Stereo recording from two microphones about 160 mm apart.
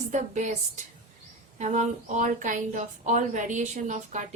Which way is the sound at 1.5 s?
50° right (ahead or behind).